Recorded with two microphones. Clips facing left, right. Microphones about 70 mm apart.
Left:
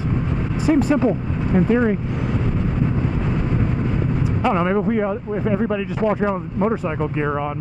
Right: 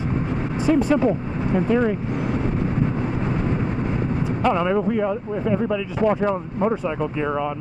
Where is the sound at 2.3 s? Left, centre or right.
Right.